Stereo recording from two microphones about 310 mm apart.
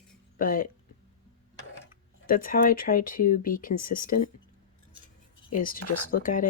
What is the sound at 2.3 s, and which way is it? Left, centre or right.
Speech, left.